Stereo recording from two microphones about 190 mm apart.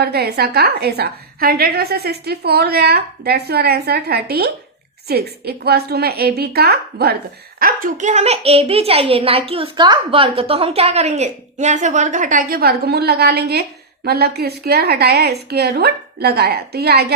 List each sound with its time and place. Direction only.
0.0 s a woman's voice: 55° right (ahead or behind)